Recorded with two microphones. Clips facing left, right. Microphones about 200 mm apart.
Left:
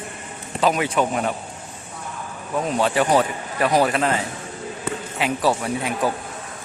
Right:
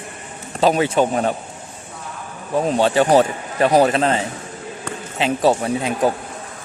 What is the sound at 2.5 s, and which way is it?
Speech, 30° right (ahead or behind).